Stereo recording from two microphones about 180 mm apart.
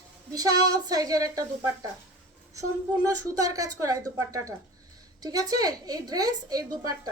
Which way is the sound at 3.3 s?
20° right (ahead or behind).